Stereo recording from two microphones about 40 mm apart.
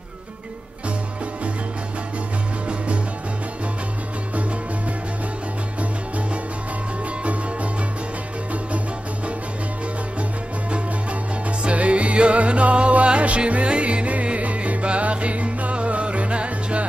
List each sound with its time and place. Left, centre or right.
11.6 s music: right